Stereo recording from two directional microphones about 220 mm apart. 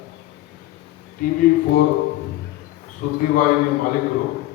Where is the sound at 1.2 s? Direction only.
40° left (ahead or behind).